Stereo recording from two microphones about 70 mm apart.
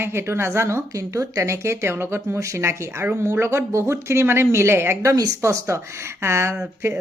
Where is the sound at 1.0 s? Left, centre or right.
Right.